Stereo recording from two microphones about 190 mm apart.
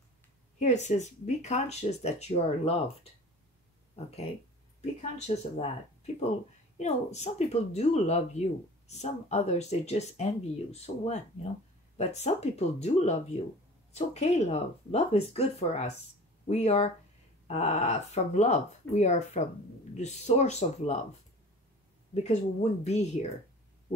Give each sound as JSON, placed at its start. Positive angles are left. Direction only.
{"t": 0.6, "sound": "speech", "side_deg": 35}
{"t": 5.1, "sound": "speech", "side_deg": 35}
{"t": 6.8, "sound": "speech", "side_deg": 35}
{"t": 22.1, "sound": "speech", "side_deg": 35}